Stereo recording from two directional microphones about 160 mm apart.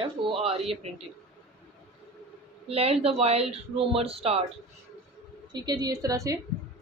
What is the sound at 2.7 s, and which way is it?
Speech, 40° right (ahead or behind).